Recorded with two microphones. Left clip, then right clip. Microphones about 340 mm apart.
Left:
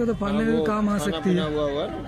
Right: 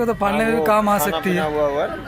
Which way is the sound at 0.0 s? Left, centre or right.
Right.